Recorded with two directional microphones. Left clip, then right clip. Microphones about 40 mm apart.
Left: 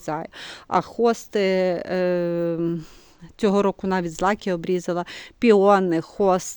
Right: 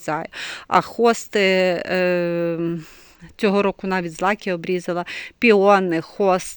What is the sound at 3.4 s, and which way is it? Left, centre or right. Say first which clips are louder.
Speech: right 1 dB; left.